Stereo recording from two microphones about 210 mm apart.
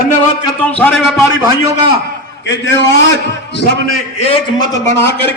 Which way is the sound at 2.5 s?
60° left (ahead or behind).